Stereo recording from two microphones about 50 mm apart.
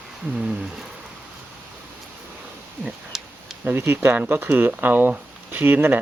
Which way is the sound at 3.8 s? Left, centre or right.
Right.